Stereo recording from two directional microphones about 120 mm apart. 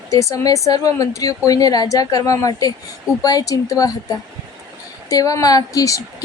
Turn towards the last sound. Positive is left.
turn(degrees=30)  # may be behind; listen again after turning